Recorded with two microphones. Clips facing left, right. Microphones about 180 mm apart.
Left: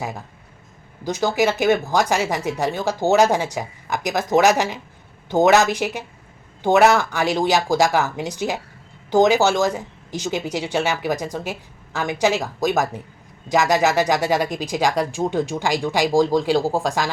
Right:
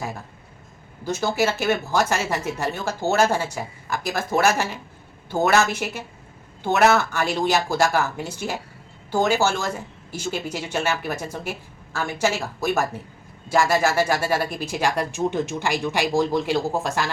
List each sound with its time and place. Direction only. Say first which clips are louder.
1.0 s speech: left 3 dB; 15° left (ahead or behind)